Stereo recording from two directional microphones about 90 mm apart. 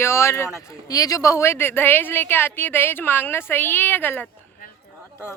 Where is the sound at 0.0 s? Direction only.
30° left (ahead or behind).